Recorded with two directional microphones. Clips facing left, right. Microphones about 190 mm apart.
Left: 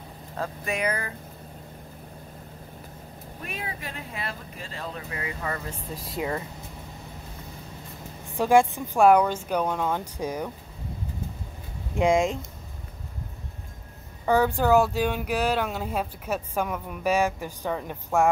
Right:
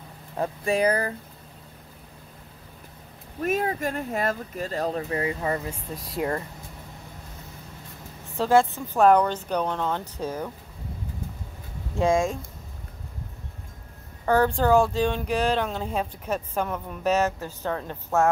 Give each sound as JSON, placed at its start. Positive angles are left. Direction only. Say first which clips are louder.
{"t": 0.7, "sound": "speech", "louder": "right 7 dB", "side_deg": -35}
{"t": 3.4, "sound": "speech", "louder": "right 12 dB", "side_deg": -45}
{"t": 5.9, "sound": "speech", "louder": "right 2 dB", "side_deg": 0}
{"t": 8.4, "sound": "speech", "louder": "left 1 dB", "side_deg": 15}
{"t": 11.9, "sound": "speech", "louder": "left 1 dB", "side_deg": 15}
{"t": 14.2, "sound": "speech", "louder": "right 1 dB", "side_deg": 10}